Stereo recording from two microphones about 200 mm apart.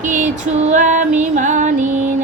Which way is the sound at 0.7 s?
40° right (ahead or behind).